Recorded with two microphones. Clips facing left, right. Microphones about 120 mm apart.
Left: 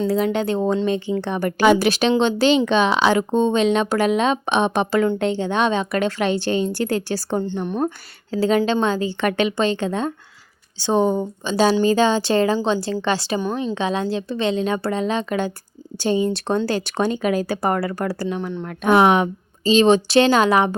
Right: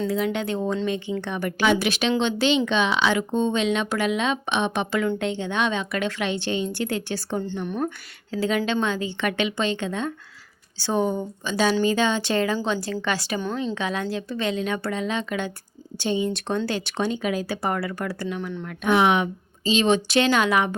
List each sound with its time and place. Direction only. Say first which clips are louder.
0.1 s a woman's voice: left 5 dB; 35° left (ahead or behind)
7.4 s a woman's voice: left 4 dB; 25° left (ahead or behind)
10.8 s a woman's voice: left 5 dB; 25° left (ahead or behind)